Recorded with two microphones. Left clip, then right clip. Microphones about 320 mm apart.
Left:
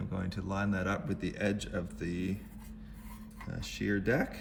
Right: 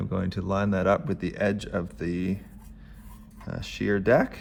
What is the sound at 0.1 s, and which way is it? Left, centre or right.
Speech, centre.